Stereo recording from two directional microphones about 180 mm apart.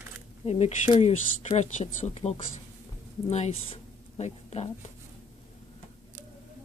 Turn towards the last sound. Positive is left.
turn(degrees=35)  # may be behind; listen again after turning